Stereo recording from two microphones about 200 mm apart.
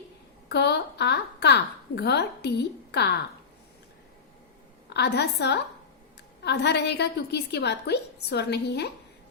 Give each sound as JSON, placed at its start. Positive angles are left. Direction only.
{"t": 0.4, "sound": "a woman's voice", "side_deg": 55}
{"t": 4.9, "sound": "a woman's voice", "side_deg": 55}